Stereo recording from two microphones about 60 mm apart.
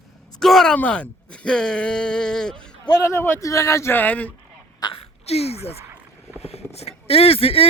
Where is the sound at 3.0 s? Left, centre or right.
Left.